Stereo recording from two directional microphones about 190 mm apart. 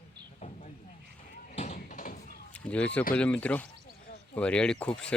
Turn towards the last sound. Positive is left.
turn(degrees=5)  # may be behind; listen again after turning